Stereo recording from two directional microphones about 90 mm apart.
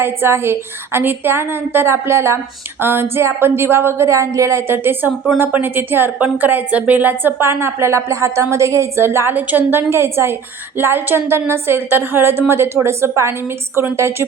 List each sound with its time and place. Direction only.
0.0 s a woman's voice: 25° right (ahead or behind)